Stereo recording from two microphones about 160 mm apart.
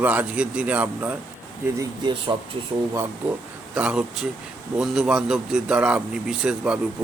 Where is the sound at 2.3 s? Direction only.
20° right (ahead or behind).